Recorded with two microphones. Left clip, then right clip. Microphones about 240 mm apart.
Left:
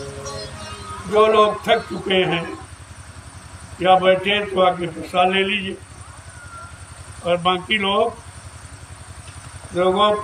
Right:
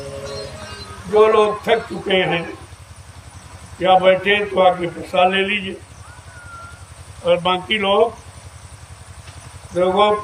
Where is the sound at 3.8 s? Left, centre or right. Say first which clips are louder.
Right 1 dB; centre.